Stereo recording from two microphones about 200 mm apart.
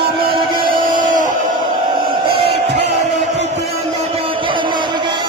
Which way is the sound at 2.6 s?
55° right (ahead or behind).